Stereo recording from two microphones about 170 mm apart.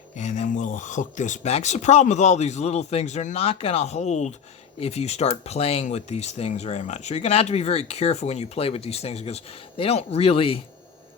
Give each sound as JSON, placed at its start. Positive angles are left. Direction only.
{"t": 0.2, "sound": "speech", "side_deg": 45}